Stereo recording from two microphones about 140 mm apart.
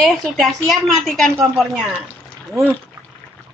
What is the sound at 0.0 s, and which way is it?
A woman's voice, centre (ahead or behind).